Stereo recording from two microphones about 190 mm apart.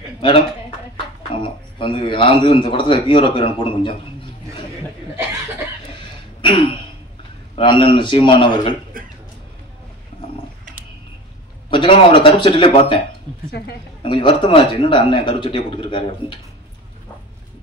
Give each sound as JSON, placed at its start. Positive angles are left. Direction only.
{"t": 1.3, "sound": "a man's voice", "side_deg": 25}
{"t": 6.4, "sound": "a sound", "side_deg": 25}
{"t": 7.5, "sound": "a man's voice", "side_deg": 25}
{"t": 9.0, "sound": "a sound", "side_deg": -45}
{"t": 11.7, "sound": "a man's voice", "side_deg": 25}
{"t": 13.5, "sound": "a woman's voice", "side_deg": 55}
{"t": 14.0, "sound": "a man's voice", "side_deg": 25}